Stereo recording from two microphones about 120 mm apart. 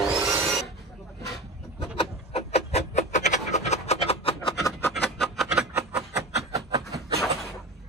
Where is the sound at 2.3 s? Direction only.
65° left (ahead or behind).